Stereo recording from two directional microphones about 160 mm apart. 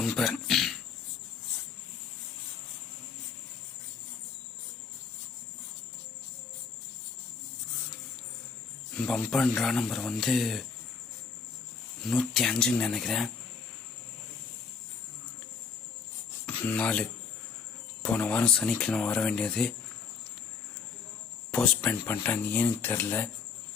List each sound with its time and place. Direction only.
0.0 s a sound: centre (ahead or behind)
8.9 s speech: 5° left (ahead or behind)
12.0 s speech: centre (ahead or behind)
16.6 s speech: 10° left (ahead or behind)
21.5 s speech: 5° left (ahead or behind)